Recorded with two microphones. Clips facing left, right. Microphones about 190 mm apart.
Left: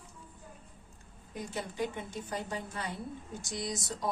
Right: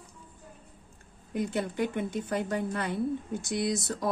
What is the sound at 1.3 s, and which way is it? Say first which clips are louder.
A woman's voice: right 8 dB; 65° right (ahead or behind).